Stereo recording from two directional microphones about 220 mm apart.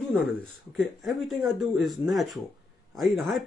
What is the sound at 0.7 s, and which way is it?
Speech, centre (ahead or behind).